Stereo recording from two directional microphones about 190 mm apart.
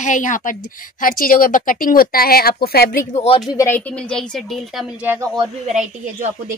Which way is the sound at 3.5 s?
15° left (ahead or behind).